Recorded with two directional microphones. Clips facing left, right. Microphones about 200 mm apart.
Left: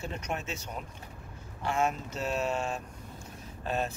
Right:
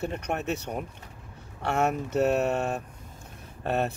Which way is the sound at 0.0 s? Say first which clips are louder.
Right 6 dB; 60° right (ahead or behind).